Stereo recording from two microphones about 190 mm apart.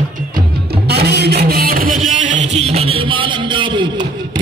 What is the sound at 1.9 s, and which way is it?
Music, centre (ahead or behind).